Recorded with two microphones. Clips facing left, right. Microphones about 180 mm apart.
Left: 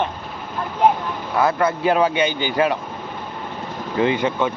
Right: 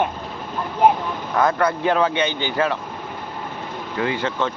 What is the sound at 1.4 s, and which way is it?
Speech, 5° left (ahead or behind).